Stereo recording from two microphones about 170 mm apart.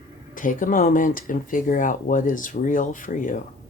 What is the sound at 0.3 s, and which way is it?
Speech, 50° left (ahead or behind).